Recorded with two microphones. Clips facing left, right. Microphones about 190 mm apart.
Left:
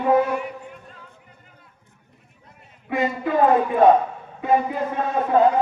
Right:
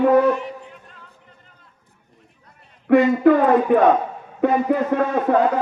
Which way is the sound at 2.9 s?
65° right (ahead or behind).